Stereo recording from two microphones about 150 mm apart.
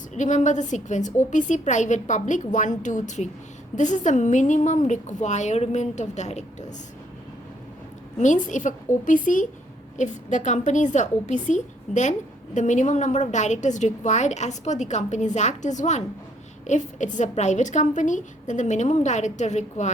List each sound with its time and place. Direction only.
0.1 s a woman's voice: 55° left (ahead or behind)
8.2 s a woman's voice: 55° left (ahead or behind)